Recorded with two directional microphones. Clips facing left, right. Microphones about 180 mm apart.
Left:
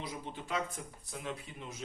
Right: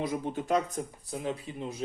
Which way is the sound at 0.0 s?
50° right (ahead or behind).